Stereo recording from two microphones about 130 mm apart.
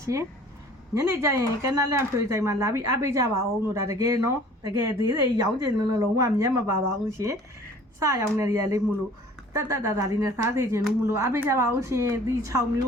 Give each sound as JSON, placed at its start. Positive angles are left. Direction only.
{"t": 0.0, "sound": "speech", "side_deg": -25}